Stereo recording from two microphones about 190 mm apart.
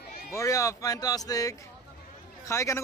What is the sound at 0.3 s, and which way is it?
Speech, 15° left (ahead or behind).